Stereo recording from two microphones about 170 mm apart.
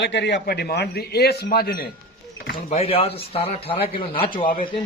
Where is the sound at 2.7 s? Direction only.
35° left (ahead or behind).